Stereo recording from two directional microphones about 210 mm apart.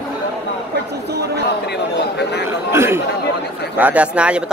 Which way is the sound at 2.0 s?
55° left (ahead or behind).